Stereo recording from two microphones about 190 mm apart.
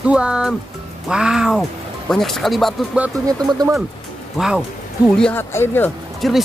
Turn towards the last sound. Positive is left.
turn(degrees=0)  # may be behind; listen again after turning